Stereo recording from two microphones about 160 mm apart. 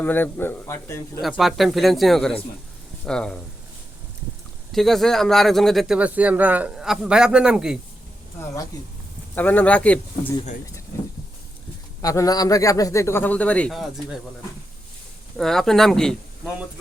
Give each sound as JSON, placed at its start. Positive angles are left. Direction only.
{"t": 0.0, "sound": "speech", "side_deg": 10}
{"t": 1.2, "sound": "speech", "side_deg": 0}
{"t": 4.7, "sound": "speech", "side_deg": 0}
{"t": 8.7, "sound": "a man's voice", "side_deg": 25}
{"t": 9.3, "sound": "speech", "side_deg": 10}
{"t": 12.0, "sound": "a man's voice", "side_deg": 20}
{"t": 15.4, "sound": "speech", "side_deg": 5}